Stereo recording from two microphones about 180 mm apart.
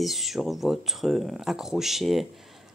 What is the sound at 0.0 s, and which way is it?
Speech, centre (ahead or behind).